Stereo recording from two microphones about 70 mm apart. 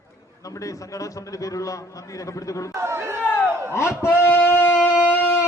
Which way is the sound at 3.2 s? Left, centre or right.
Left.